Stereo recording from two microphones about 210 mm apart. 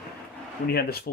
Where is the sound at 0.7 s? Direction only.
45° left (ahead or behind).